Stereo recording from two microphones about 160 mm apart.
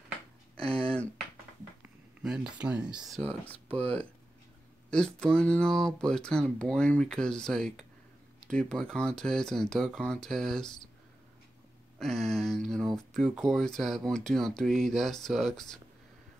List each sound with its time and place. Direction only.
0.6 s speech: 35° right (ahead or behind)
1.8 s speech: 5° right (ahead or behind)
3.4 s speech: 10° left (ahead or behind)
4.9 s speech: 5° left (ahead or behind)
12.0 s speech: centre (ahead or behind)